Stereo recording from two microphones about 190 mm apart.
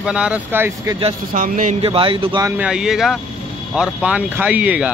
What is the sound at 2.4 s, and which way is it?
Speech, 5° right (ahead or behind).